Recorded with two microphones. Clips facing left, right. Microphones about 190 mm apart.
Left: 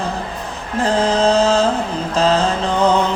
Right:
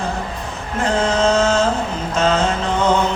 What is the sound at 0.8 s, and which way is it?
Mantra, 35° left (ahead or behind).